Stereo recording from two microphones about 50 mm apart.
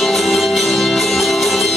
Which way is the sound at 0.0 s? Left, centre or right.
Centre.